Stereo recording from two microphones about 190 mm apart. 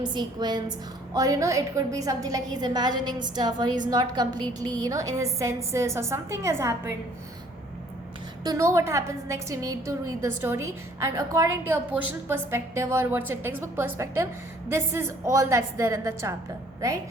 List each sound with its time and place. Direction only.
0.0 s a woman's voice: 25° right (ahead or behind)
8.4 s a woman's voice: 15° right (ahead or behind)